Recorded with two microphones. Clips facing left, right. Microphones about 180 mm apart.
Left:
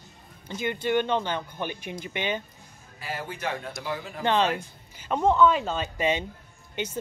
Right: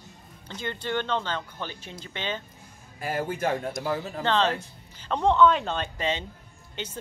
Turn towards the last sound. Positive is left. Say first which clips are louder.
# left 5 dB
turn(degrees=10)  # may be behind; listen again after turning